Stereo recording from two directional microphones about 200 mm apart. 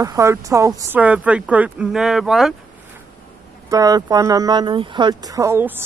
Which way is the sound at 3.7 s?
20° right (ahead or behind).